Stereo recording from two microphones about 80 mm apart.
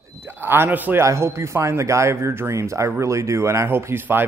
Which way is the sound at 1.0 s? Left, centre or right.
Right.